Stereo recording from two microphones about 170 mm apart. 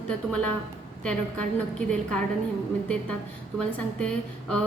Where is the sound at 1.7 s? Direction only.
5° left (ahead or behind).